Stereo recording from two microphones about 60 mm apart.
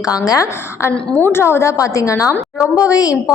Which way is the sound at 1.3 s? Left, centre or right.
Left.